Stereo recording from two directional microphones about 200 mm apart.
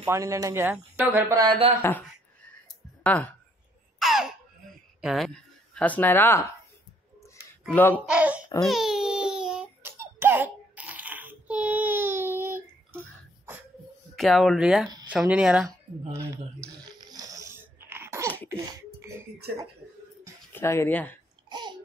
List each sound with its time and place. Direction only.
0.0 s speech: 15° right (ahead or behind)
1.8 s speech: 10° left (ahead or behind)
4.0 s baby laughter: centre (ahead or behind)
5.0 s speech: centre (ahead or behind)
7.9 s speech: 5° right (ahead or behind)
8.6 s baby cry: centre (ahead or behind)
9.9 s babbling: 10° right (ahead or behind)
14.1 s speech: centre (ahead or behind)
16.6 s sneeze: 20° right (ahead or behind)
20.5 s speech: 10° left (ahead or behind)
21.5 s babbling: 20° right (ahead or behind)